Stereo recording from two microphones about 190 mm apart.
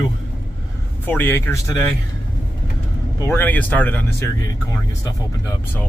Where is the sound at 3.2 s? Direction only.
10° left (ahead or behind).